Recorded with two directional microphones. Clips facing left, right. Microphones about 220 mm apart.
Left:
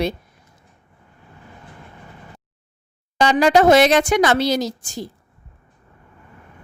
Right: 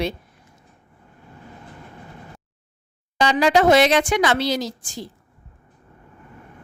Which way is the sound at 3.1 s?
45° left (ahead or behind).